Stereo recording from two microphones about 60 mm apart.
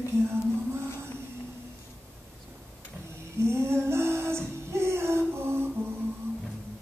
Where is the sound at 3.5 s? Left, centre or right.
Right.